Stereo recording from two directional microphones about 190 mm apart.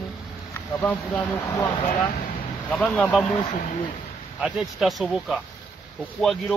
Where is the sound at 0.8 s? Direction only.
10° left (ahead or behind).